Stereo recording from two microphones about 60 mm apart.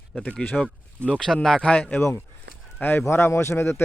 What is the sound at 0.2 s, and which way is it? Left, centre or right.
Speech, centre.